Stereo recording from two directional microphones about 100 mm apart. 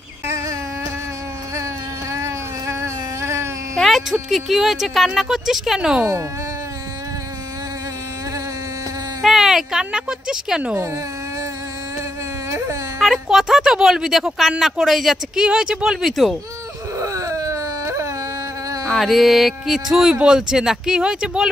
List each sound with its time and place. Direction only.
2.1 s a sound: 30° right (ahead or behind)
3.7 s speech: centre (ahead or behind)
9.2 s speech: 5° right (ahead or behind)
12.4 s a sound: 30° right (ahead or behind)
13.0 s speech: 5° right (ahead or behind)
17.0 s dog: 35° right (ahead or behind)
18.9 s speech: centre (ahead or behind)